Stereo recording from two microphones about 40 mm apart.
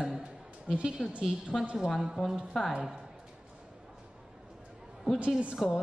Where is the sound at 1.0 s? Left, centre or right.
Centre.